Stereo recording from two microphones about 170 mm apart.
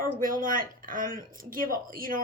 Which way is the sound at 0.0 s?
55° right (ahead or behind).